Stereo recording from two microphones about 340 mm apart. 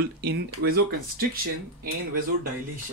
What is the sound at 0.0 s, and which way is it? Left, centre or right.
Speech, right.